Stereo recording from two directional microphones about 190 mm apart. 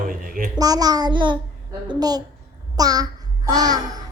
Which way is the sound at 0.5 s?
20° right (ahead or behind).